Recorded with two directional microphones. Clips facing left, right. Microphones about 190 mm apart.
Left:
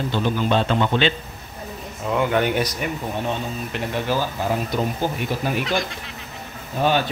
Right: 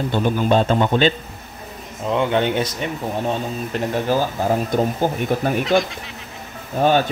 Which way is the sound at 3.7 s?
45° right (ahead or behind).